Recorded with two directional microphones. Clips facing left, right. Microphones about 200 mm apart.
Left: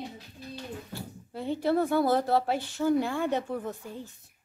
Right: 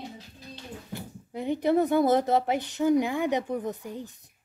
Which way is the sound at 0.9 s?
15° right (ahead or behind).